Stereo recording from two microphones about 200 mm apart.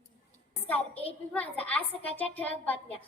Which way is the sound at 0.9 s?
30° left (ahead or behind).